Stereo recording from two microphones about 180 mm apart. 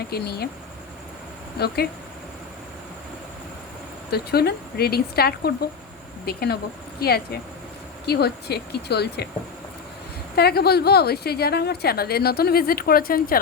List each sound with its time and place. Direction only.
0.1 s a woman's voice: 60° left (ahead or behind)
1.5 s a woman's voice: 60° left (ahead or behind)
4.1 s a woman's voice: 60° left (ahead or behind)
10.3 s a woman's voice: 60° left (ahead or behind)